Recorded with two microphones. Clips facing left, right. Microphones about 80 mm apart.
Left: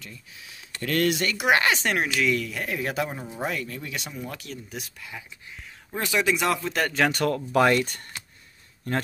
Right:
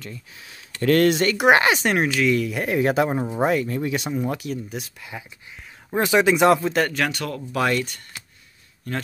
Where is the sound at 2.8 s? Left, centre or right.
Right.